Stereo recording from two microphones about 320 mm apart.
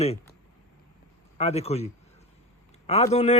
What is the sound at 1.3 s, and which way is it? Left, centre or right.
Speech, centre.